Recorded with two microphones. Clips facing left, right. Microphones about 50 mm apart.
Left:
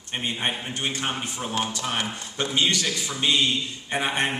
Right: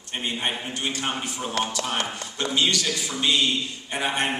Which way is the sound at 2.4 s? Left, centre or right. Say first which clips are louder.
Even; left.